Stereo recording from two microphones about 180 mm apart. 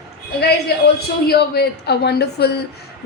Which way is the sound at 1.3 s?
65° left (ahead or behind).